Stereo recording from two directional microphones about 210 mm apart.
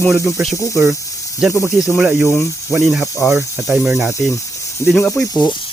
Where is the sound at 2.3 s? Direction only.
15° left (ahead or behind).